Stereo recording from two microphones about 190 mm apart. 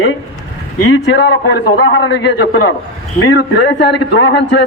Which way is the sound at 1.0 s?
65° left (ahead or behind).